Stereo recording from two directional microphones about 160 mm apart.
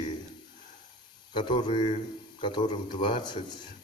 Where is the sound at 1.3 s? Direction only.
30° left (ahead or behind).